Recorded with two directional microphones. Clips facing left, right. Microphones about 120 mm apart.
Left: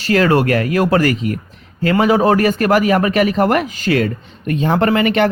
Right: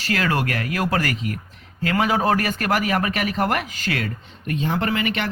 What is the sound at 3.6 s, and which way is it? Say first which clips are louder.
Speech: left 10 dB; 25° left (ahead or behind).